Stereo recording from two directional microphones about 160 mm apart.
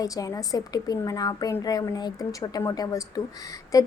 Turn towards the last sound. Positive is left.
turn(degrees=20)  # may be behind; listen again after turning